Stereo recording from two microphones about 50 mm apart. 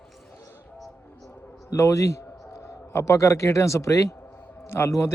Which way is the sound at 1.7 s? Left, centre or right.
Left.